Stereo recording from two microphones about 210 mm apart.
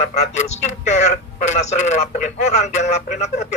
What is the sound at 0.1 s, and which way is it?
Speech, 35° left (ahead or behind).